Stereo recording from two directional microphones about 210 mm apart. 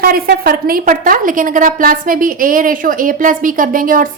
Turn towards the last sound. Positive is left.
turn(degrees=-40)  # may be behind; listen again after turning